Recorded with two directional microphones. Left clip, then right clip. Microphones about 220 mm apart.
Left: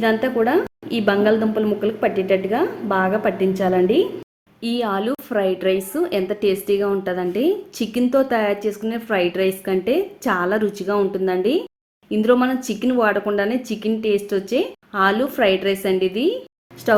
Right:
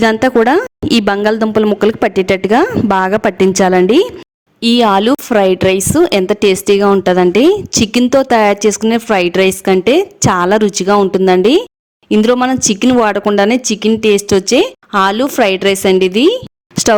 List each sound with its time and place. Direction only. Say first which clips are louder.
0.0 s a woman's voice: right 9 dB; 50° right (ahead or behind)